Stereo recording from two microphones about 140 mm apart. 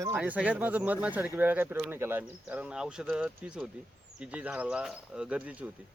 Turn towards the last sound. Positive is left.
turn(degrees=-10)  # may be behind; listen again after turning